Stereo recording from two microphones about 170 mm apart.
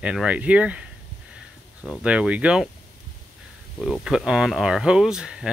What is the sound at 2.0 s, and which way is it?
Speech, 5° right (ahead or behind).